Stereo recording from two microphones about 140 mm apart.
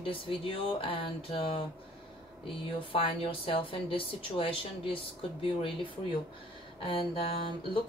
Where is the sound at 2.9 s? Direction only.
40° left (ahead or behind).